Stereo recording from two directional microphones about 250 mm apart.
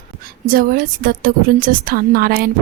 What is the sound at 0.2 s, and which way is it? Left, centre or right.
A woman's voice, right.